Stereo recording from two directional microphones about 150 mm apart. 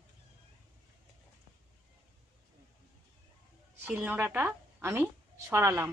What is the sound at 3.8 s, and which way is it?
A woman's voice, 10° right (ahead or behind).